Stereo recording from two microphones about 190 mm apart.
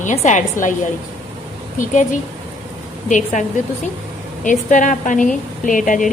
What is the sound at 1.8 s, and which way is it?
Speech, 40° left (ahead or behind).